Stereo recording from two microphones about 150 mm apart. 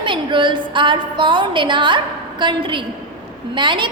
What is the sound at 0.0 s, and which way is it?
A woman's voice, 35° right (ahead or behind).